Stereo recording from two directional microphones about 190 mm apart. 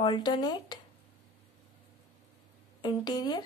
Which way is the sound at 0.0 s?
25° left (ahead or behind).